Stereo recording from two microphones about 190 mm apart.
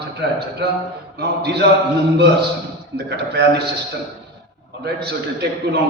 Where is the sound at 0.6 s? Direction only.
60° right (ahead or behind).